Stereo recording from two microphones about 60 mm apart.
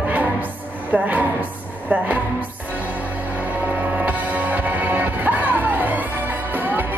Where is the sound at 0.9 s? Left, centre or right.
Right.